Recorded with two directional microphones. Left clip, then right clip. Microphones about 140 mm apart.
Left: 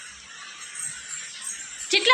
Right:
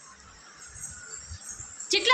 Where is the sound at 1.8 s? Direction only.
30° left (ahead or behind).